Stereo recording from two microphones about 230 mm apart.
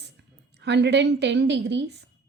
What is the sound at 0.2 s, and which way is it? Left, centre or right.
A woman's voice, right.